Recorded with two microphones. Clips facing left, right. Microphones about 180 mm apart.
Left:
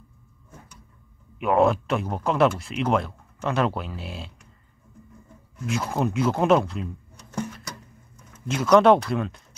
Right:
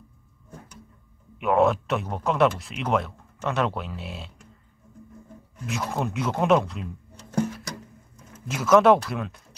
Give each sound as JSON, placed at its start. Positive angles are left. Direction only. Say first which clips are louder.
{"t": 1.4, "sound": "speech", "louder": "left 1 dB", "side_deg": 0}
{"t": 5.7, "sound": "speech", "louder": "left 3 dB", "side_deg": 0}
{"t": 8.5, "sound": "speech", "louder": "left 1 dB", "side_deg": -5}